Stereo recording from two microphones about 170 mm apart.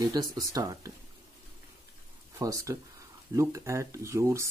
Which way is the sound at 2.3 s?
20° right (ahead or behind).